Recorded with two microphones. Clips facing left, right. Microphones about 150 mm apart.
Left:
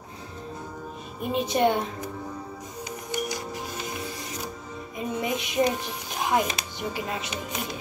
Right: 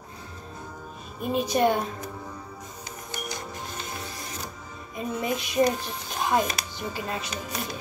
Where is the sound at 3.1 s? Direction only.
10° left (ahead or behind).